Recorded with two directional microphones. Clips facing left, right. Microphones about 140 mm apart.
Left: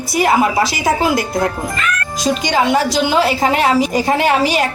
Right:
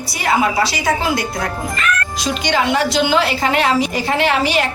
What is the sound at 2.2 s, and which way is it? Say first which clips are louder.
A woman's voice: left 5 dB; 45° left (ahead or behind).